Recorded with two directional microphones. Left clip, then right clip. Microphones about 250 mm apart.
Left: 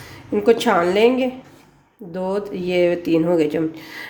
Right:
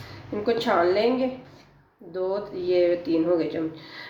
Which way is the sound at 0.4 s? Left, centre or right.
Left.